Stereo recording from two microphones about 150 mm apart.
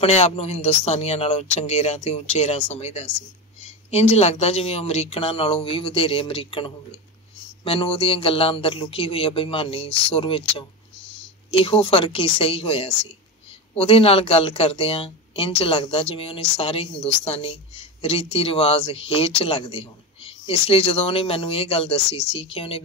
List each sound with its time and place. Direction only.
0.0 s speech: 45° left (ahead or behind)